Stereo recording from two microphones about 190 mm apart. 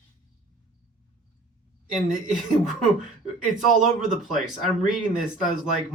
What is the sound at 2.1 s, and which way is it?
Speech, centre (ahead or behind).